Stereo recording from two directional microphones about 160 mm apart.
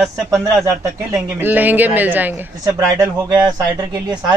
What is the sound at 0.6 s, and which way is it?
Speech, 15° right (ahead or behind).